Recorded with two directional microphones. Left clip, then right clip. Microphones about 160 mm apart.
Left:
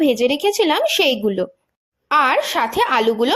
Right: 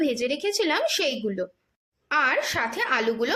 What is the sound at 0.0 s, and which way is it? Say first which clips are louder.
A woman's voice: left 9 dB; 35° left (ahead or behind).